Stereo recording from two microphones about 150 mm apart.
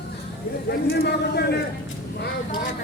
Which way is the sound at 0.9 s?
90° left.